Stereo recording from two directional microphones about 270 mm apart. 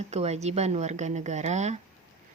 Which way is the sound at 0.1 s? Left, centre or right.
Right.